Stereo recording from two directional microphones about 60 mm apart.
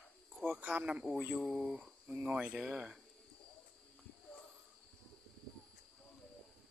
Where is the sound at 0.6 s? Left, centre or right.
Right.